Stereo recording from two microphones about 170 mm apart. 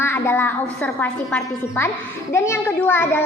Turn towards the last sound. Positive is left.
turn(degrees=15)  # may be behind; listen again after turning